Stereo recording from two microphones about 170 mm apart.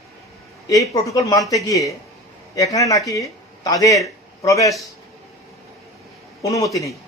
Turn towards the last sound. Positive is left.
turn(degrees=20)  # may be behind; listen again after turning